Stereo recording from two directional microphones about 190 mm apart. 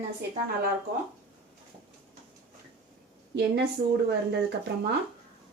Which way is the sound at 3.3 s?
60° right (ahead or behind).